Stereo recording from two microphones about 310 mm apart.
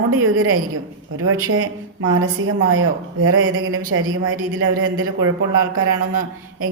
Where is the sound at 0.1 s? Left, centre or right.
Right.